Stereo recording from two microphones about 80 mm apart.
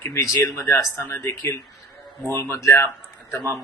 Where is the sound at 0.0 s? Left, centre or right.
Left.